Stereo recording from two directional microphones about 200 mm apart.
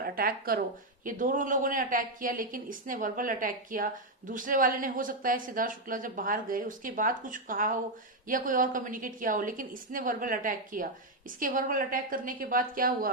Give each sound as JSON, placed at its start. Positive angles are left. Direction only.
{"t": 0.0, "sound": "speech", "side_deg": -45}